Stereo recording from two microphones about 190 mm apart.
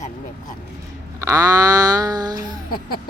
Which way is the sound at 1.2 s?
15° right (ahead or behind).